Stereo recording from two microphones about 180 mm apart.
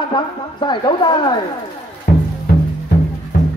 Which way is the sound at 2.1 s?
55° left (ahead or behind).